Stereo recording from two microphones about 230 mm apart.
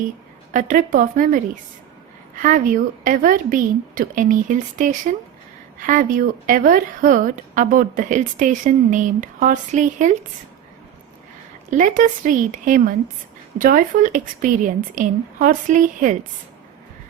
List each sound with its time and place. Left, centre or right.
0.5 s a woman's voice: right
11.7 s a woman's voice: right